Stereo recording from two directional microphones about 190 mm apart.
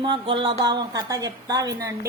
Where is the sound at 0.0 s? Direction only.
25° right (ahead or behind).